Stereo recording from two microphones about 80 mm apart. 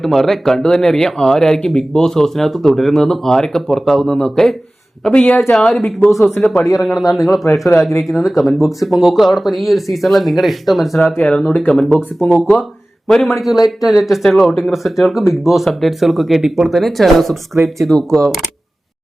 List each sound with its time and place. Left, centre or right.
0.0 s speech: centre
11.3 s speech: centre
12.3 s speech: centre